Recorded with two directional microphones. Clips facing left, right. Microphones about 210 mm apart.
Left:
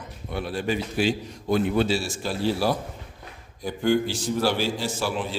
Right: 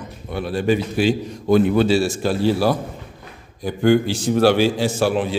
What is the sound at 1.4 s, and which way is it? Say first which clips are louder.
A man's voice: right 7 dB; 75° right (ahead or behind).